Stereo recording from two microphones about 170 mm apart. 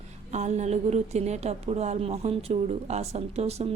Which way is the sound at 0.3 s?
45° right (ahead or behind).